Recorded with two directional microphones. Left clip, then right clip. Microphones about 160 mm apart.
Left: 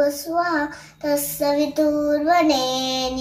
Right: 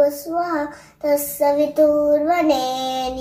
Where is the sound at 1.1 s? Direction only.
15° right (ahead or behind).